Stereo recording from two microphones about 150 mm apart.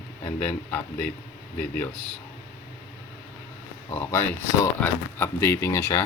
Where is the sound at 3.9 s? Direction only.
15° left (ahead or behind).